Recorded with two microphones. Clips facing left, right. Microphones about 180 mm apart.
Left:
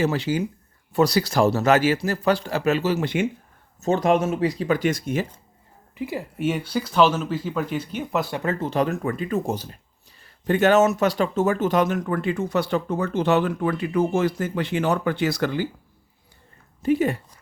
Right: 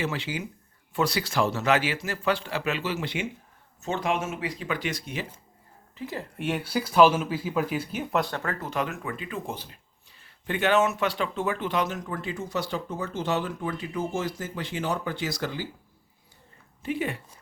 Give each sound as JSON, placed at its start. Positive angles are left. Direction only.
{"t": 0.0, "sound": "speech", "side_deg": 40}
{"t": 6.0, "sound": "speech", "side_deg": 10}
{"t": 8.4, "sound": "speech", "side_deg": 25}
{"t": 16.8, "sound": "speech", "side_deg": 40}